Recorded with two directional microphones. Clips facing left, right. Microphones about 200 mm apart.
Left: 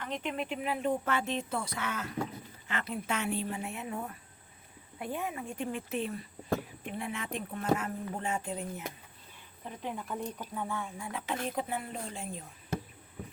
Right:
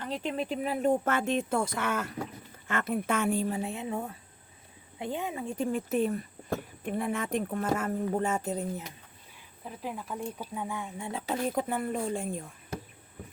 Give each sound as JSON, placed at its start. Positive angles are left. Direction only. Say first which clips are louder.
{"t": 0.0, "sound": "speech", "louder": "right 3 dB", "side_deg": -35}
{"t": 3.6, "sound": "speech", "louder": "right 4 dB", "side_deg": -30}
{"t": 5.5, "sound": "speech", "louder": "right 6 dB", "side_deg": -40}
{"t": 9.6, "sound": "speech", "louder": "right 1 dB", "side_deg": -5}
{"t": 11.3, "sound": "speech", "louder": "right 5 dB", "side_deg": -45}